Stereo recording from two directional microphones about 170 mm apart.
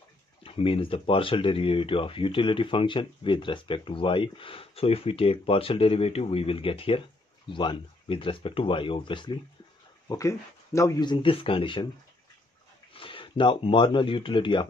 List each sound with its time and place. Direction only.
0.4 s speech: 35° left (ahead or behind)
12.9 s speech: 30° left (ahead or behind)